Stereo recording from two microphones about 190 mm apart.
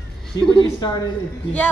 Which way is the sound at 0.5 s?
20° left (ahead or behind).